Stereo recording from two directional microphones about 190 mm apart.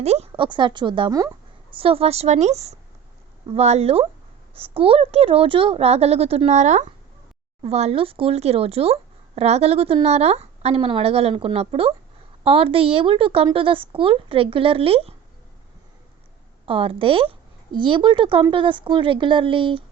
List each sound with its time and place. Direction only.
0.0 s a woman's voice: 35° right (ahead or behind)
16.6 s a woman's voice: 30° right (ahead or behind)